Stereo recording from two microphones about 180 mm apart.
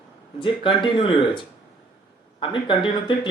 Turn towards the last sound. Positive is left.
turn(degrees=25)  # may be behind; listen again after turning